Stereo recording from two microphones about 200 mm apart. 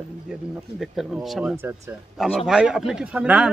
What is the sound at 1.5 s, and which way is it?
Speech, 10° right (ahead or behind).